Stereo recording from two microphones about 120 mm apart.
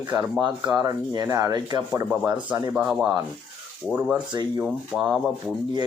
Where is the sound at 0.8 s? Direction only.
30° right (ahead or behind).